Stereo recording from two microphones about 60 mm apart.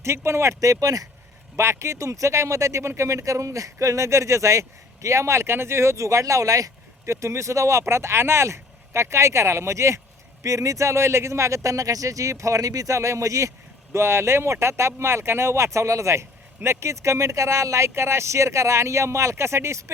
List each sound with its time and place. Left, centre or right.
0.0 s speech: right
0.6 s speech: right
1.8 s speech: right
7.0 s speech: right
10.4 s speech: right
13.9 s speech: right